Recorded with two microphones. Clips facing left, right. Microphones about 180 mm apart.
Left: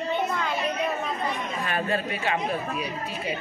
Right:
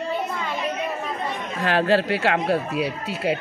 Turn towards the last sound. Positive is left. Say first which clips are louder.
# right 6 dB
turn(degrees=-80)